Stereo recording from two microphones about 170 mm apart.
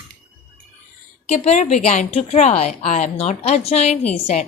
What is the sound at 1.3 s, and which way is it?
A woman's voice, 40° left (ahead or behind).